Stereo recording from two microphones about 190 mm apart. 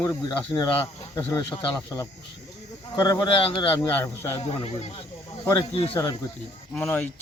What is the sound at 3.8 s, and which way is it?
Speech, 15° left (ahead or behind).